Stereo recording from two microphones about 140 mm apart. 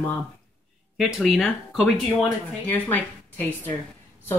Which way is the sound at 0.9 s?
Centre (ahead or behind).